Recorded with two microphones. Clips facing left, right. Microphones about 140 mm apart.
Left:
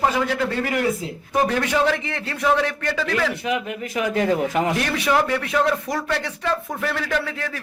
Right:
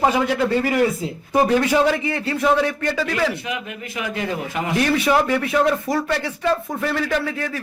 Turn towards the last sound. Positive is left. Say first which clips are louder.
# right 2 dB
turn(degrees=-5)  # may be behind; listen again after turning